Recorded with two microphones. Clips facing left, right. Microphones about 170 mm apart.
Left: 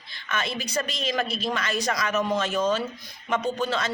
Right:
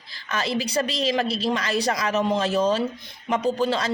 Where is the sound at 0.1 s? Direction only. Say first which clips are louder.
Right 4 dB; 35° right (ahead or behind).